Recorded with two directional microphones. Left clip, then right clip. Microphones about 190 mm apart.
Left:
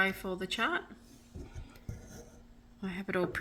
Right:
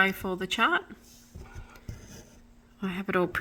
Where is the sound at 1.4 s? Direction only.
40° right (ahead or behind).